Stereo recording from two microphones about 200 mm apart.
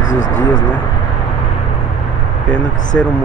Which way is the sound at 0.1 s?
40° left (ahead or behind).